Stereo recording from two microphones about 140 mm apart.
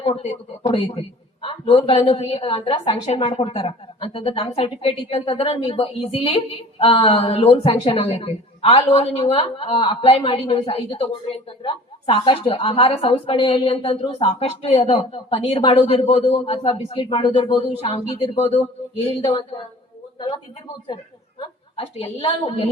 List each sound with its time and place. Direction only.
0.0 s a woman's voice: 45° left (ahead or behind)
20.8 s a woman's voice: 35° left (ahead or behind)